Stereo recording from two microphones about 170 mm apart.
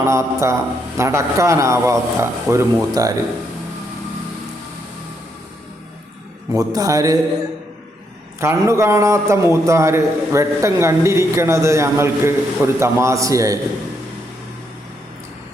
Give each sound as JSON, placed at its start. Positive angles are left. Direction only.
{"t": 0.0, "sound": "a man's voice", "side_deg": -15}
{"t": 6.5, "sound": "a man's voice", "side_deg": -20}
{"t": 8.4, "sound": "a man's voice", "side_deg": -15}